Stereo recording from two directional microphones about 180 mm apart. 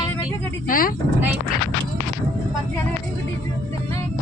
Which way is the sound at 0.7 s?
50° left (ahead or behind).